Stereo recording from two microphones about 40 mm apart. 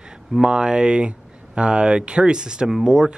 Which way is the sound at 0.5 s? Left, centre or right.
Right.